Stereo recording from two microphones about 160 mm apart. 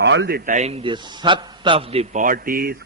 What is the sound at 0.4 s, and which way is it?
A man's voice, 45° right (ahead or behind).